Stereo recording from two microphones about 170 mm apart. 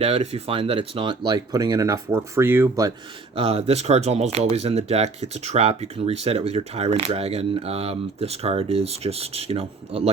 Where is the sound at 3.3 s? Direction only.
35° right (ahead or behind).